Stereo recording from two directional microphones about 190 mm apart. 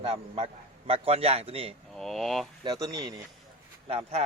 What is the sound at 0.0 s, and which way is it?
A man's voice, 35° right (ahead or behind).